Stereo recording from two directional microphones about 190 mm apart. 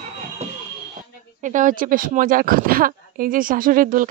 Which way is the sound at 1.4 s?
40° right (ahead or behind).